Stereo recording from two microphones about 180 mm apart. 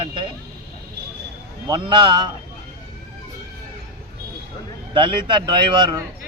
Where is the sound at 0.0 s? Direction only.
25° right (ahead or behind).